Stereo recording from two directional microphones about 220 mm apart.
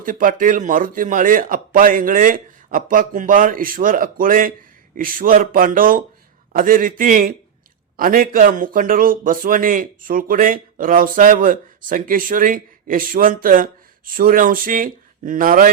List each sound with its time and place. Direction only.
0.0 s speech: 40° right (ahead or behind)